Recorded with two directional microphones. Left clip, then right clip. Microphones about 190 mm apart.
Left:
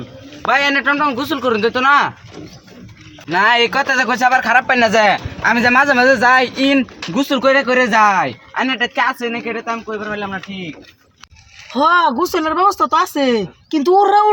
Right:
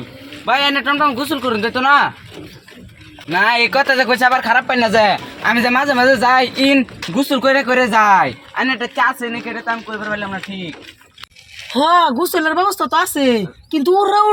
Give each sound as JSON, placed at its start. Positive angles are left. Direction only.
{"t": 0.4, "sound": "speech", "side_deg": 0}
{"t": 3.2, "sound": "speech", "side_deg": -5}
{"t": 9.2, "sound": "speech", "side_deg": 35}
{"t": 11.8, "sound": "speech", "side_deg": 0}